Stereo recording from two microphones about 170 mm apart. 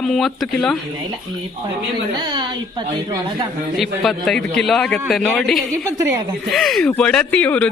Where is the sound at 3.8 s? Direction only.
Centre (ahead or behind).